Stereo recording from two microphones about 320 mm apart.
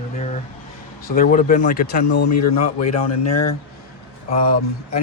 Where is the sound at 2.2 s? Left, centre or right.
Left.